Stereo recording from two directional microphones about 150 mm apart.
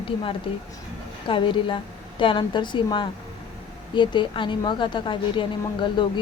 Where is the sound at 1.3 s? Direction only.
35° left (ahead or behind).